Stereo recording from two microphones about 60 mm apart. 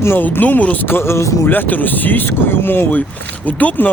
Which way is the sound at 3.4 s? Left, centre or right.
Left.